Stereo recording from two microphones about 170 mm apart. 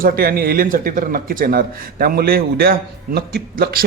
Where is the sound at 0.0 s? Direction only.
60° right (ahead or behind).